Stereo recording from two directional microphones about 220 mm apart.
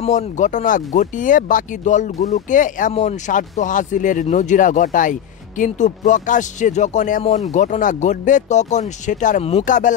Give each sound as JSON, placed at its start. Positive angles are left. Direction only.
{"t": 0.0, "sound": "speech", "side_deg": 35}